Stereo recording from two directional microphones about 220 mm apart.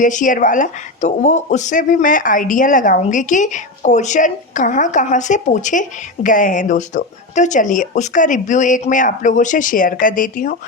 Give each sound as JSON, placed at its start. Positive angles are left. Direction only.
{"t": 0.0, "sound": "speech", "side_deg": 35}